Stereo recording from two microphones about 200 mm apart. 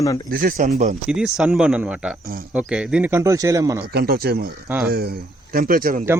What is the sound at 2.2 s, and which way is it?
Speech, 45° right (ahead or behind).